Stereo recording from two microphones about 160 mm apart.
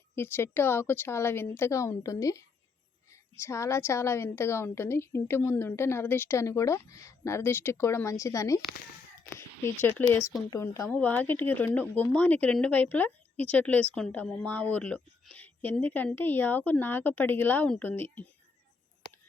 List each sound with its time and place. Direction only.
0.2 s speech: 15° left (ahead or behind)
9.8 s speech: 10° left (ahead or behind)